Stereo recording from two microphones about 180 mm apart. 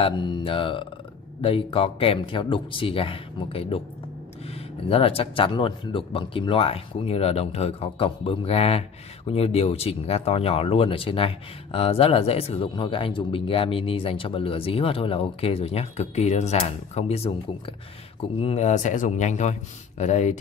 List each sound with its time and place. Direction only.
0.0 s speech: 30° left (ahead or behind)